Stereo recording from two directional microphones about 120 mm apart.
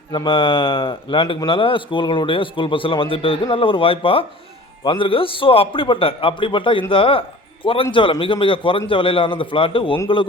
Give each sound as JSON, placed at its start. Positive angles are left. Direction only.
{"t": 0.1, "sound": "a man's voice", "side_deg": 40}